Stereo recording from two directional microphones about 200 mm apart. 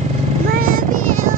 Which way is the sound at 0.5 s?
45° right (ahead or behind).